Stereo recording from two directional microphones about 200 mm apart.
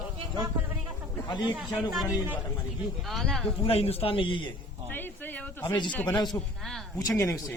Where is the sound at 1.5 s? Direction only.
Centre (ahead or behind).